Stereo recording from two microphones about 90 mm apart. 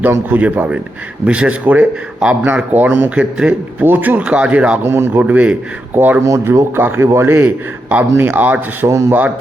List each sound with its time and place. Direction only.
0.1 s a man's voice: 20° right (ahead or behind)
4.8 s a man's voice: 25° right (ahead or behind)
5.2 s a man's voice: 15° right (ahead or behind)
8.9 s a man's voice: 35° right (ahead or behind)